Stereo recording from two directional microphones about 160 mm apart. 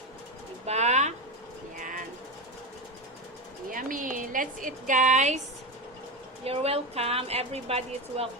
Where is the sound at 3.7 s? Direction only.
55° right (ahead or behind).